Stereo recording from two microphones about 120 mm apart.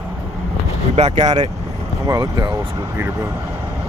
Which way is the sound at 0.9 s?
70° right (ahead or behind).